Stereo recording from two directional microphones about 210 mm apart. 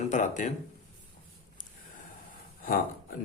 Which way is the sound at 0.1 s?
35° left (ahead or behind).